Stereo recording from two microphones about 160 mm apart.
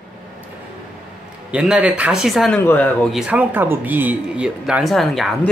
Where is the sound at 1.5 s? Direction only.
5° right (ahead or behind).